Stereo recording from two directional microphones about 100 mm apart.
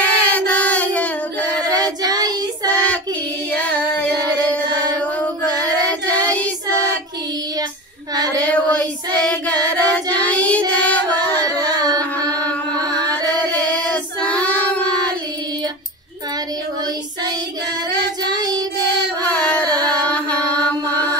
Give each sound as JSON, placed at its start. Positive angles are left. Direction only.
{"t": 0.0, "sound": "female singing", "side_deg": 15}
{"t": 2.0, "sound": "child singing", "side_deg": -40}
{"t": 2.6, "sound": "child singing", "side_deg": 15}
{"t": 5.2, "sound": "child singing", "side_deg": 15}
{"t": 8.4, "sound": "child singing", "side_deg": 15}
{"t": 11.5, "sound": "a sound", "side_deg": -40}
{"t": 13.5, "sound": "child singing", "side_deg": 15}
{"t": 18.2, "sound": "child singing", "side_deg": -40}
{"t": 19.9, "sound": "music", "side_deg": 15}